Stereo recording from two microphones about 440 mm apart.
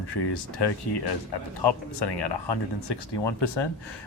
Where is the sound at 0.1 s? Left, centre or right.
Left.